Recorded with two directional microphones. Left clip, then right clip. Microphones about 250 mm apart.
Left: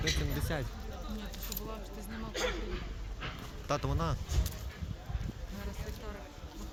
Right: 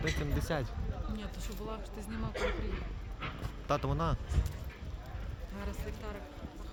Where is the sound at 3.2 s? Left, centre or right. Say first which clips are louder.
Right 1 dB; centre.